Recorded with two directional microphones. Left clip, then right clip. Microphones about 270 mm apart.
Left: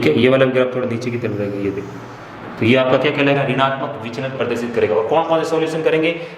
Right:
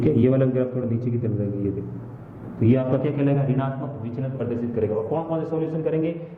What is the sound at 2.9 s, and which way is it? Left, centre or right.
A man's voice, centre.